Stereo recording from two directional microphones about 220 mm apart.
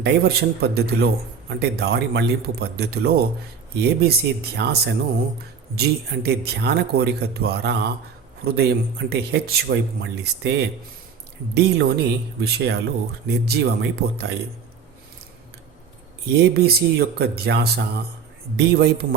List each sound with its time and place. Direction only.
0.0 s speech: 45° right (ahead or behind)
16.4 s speech: 45° right (ahead or behind)